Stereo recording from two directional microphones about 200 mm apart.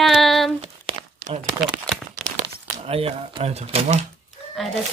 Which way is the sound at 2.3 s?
30° right (ahead or behind).